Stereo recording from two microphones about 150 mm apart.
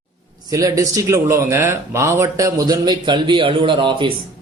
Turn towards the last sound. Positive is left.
turn(degrees=-35)  # may be behind; listen again after turning